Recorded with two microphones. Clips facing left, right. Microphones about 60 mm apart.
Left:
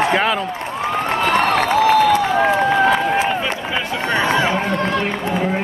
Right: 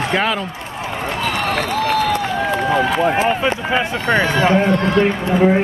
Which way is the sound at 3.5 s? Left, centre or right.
Right.